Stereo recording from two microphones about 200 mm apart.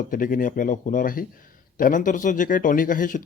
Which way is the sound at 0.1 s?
45° left (ahead or behind).